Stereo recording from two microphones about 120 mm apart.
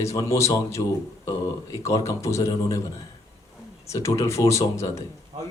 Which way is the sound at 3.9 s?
25° left (ahead or behind).